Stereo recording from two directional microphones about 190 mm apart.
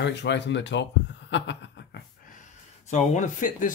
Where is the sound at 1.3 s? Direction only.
70° left (ahead or behind).